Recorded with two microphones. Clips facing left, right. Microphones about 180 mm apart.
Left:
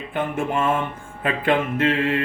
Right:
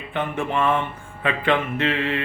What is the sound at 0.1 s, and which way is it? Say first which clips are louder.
Mantra: left 1 dB; 45° left (ahead or behind).